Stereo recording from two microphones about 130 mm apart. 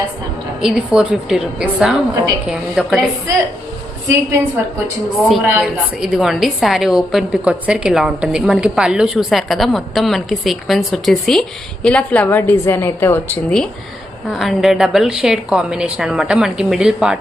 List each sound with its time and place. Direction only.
0.6 s a woman's voice: 5° right (ahead or behind)
4.1 s a woman's voice: 20° right (ahead or behind); by 13.7 s 10° left (ahead or behind)
14.3 s a woman's voice: centre (ahead or behind)